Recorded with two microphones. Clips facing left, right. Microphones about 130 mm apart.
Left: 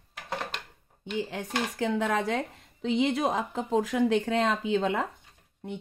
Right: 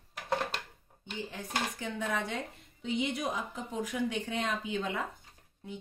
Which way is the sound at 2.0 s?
90° left.